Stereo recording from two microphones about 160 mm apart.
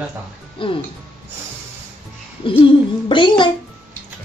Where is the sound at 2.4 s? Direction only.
30° left (ahead or behind).